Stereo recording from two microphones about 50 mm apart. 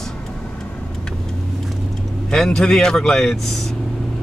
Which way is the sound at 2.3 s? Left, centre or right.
Centre.